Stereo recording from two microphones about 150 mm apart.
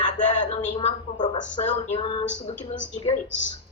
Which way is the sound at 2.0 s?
35° left (ahead or behind).